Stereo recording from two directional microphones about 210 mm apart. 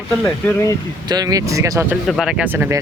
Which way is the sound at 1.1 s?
20° right (ahead or behind).